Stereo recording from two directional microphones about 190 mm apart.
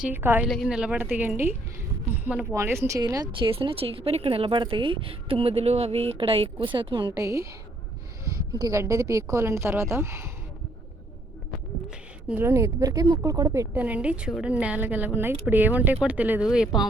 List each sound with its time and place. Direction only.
0.0 s speech: 10° right (ahead or behind)
0.4 s speech: centre (ahead or behind)
12.3 s speech: 10° right (ahead or behind)